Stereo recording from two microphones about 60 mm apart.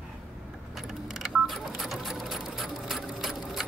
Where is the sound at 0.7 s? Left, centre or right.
Centre.